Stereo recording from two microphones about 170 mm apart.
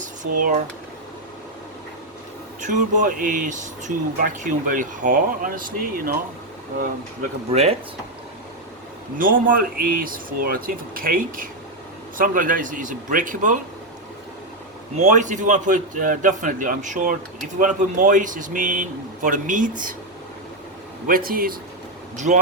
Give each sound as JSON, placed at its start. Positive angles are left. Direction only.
{"t": 0.0, "sound": "a sound", "side_deg": -50}
{"t": 2.6, "sound": "speech", "side_deg": -45}
{"t": 7.5, "sound": "speech", "side_deg": -40}
{"t": 9.1, "sound": "speech", "side_deg": -55}
{"t": 14.9, "sound": "speech", "side_deg": -45}
{"t": 21.1, "sound": "speech", "side_deg": -60}